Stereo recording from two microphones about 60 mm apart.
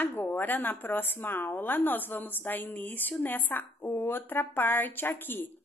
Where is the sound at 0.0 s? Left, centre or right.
Left.